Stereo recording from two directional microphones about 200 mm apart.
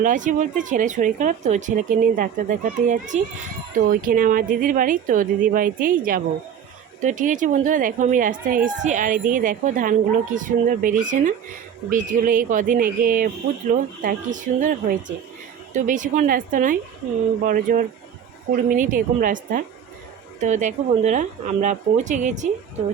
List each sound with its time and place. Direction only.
0.0 s speech: 40° right (ahead or behind)